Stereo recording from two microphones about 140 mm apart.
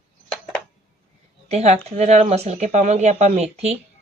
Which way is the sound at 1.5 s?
50° right (ahead or behind).